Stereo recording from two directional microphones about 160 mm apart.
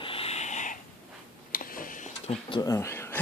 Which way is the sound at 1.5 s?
60° left (ahead or behind).